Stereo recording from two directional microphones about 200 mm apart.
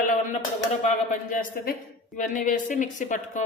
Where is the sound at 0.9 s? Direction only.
40° left (ahead or behind).